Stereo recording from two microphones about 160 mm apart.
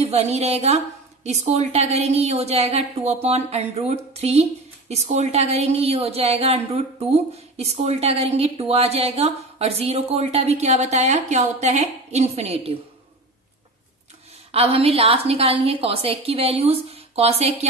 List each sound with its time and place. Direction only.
0.0 s a woman's voice: 40° right (ahead or behind)
14.5 s a woman's voice: 40° right (ahead or behind)